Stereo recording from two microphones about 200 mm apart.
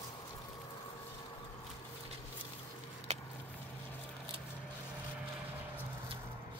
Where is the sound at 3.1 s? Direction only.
30° right (ahead or behind).